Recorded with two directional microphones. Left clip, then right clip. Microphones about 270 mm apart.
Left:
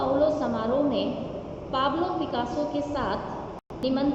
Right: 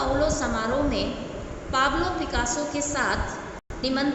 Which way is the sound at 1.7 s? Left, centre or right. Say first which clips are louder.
Right 2 dB; right.